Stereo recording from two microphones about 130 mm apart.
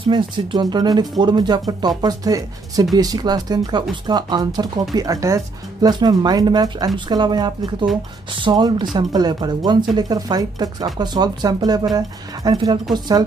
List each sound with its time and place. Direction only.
0.0 s speech: 40° right (ahead or behind)